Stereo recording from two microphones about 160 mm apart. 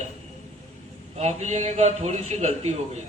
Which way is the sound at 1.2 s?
45° right (ahead or behind).